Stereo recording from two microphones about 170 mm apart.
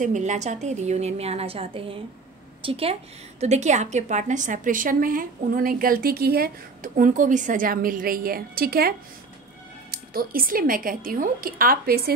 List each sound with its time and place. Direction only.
0.0 s a woman's voice: 45° right (ahead or behind)